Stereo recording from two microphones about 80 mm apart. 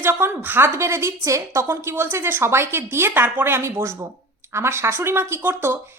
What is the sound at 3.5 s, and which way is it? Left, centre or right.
Speech, right.